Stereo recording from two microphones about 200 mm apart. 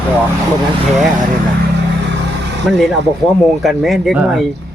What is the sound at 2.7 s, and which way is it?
Speech, centre (ahead or behind).